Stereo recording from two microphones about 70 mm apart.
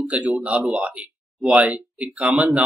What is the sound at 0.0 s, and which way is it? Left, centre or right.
Speech, centre.